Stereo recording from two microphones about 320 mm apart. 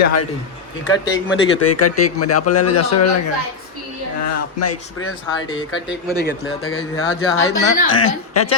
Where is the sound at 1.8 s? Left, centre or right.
Left.